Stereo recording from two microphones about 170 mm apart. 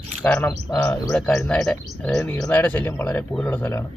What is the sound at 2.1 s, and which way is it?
Speech, 15° left (ahead or behind).